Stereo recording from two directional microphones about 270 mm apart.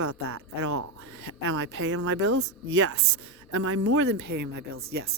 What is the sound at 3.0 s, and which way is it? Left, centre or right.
Speech, right.